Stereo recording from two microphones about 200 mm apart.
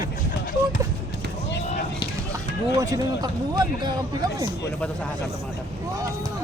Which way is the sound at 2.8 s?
20° right (ahead or behind).